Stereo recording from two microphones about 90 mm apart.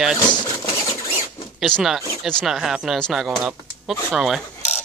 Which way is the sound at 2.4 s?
5° right (ahead or behind).